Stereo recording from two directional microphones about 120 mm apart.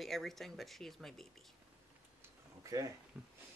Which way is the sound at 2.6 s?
25° right (ahead or behind).